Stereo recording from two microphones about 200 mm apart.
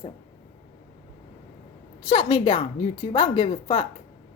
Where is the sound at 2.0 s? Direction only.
25° left (ahead or behind).